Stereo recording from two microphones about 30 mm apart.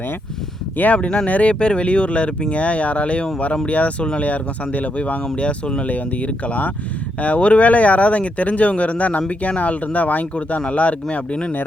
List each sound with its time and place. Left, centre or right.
0.8 s speech: left
1.3 s speech: left
1.5 s speech: left
5.4 s speech: left
5.8 s speech: left
10.7 s speech: left